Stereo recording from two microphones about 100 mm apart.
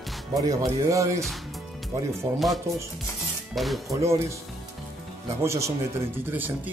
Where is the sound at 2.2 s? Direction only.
30° right (ahead or behind).